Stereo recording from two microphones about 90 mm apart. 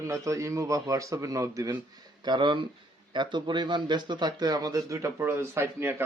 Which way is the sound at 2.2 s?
55° right (ahead or behind).